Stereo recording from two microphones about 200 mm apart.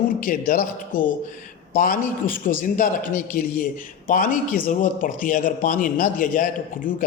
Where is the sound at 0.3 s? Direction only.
45° left (ahead or behind).